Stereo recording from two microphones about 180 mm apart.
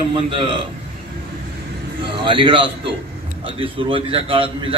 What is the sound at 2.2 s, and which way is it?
A man's voice, 30° right (ahead or behind).